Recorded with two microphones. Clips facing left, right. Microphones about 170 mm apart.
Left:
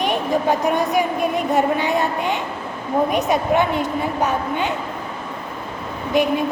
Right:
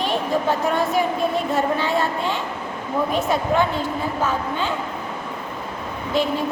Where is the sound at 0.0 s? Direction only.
15° left (ahead or behind).